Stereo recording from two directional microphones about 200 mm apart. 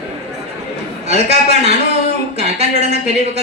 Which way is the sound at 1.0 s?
30° right (ahead or behind).